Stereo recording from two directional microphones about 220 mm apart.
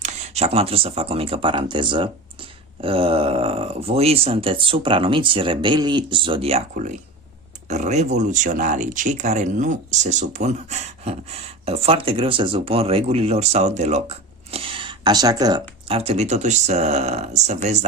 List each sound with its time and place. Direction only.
0.0 s speech: 30° right (ahead or behind)